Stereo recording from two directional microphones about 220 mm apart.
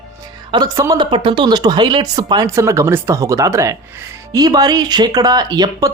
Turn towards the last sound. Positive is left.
turn(degrees=-20)  # may be behind; listen again after turning